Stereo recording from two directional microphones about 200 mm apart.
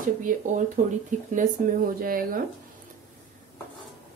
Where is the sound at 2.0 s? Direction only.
45° right (ahead or behind).